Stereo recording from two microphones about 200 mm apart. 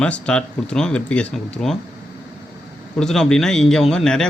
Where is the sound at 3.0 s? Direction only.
Centre (ahead or behind).